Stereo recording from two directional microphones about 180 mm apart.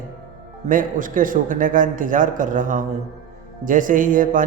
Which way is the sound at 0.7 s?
50° right (ahead or behind).